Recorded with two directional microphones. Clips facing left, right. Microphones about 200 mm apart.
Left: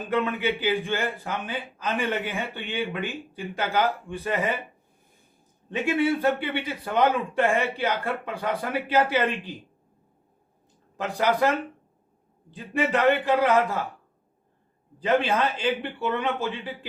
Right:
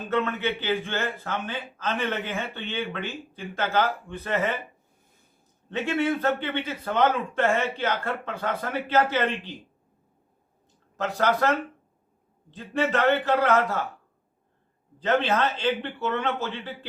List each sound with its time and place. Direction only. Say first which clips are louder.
0.1 s a man's voice: left 1 dB; 10° left (ahead or behind)
5.6 s a man's voice: left 2 dB; 10° left (ahead or behind)
10.9 s a man's voice: even; 15° left (ahead or behind)
14.9 s a man's voice: left 1 dB; 10° left (ahead or behind)